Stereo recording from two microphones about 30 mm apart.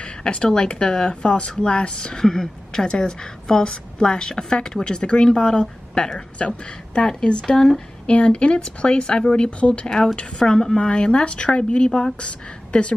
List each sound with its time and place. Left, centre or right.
0.2 s a woman's voice: left
2.1 s a woman's voice: centre
2.8 s a woman's voice: left
7.4 s speech: centre
8.1 s speech: left
10.1 s a woman's voice: left
10.8 s speech: left
12.2 s speech: left